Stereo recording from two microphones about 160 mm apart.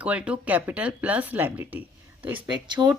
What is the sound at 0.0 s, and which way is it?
Speech, 10° right (ahead or behind).